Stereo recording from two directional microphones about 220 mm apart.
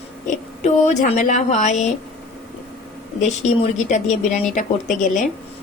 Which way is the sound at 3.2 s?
30° left (ahead or behind).